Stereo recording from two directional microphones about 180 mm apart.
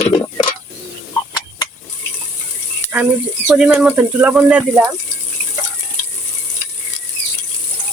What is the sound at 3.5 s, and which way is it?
Speech, 5° right (ahead or behind).